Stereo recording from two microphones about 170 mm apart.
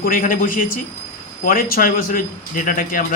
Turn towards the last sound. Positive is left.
turn(degrees=55)  # may be behind; listen again after turning